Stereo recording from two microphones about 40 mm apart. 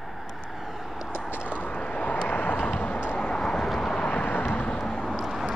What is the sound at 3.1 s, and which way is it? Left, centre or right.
Vehicle, centre.